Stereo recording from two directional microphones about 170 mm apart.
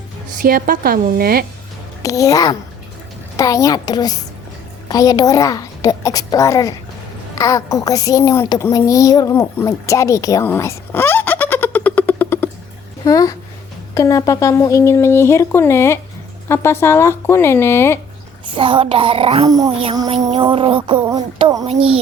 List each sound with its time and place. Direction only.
0.4 s a woman's voice: 60° right (ahead or behind)
2.0 s a woman's voice: 20° left (ahead or behind)
9.6 s fowl: 20° left (ahead or behind)
13.1 s a woman's voice: 20° left (ahead or behind)
18.4 s speech: 30° right (ahead or behind)
19.5 s a sound: 20° right (ahead or behind)
19.8 s speech: 30° right (ahead or behind)
20.3 s a sound: 30° right (ahead or behind)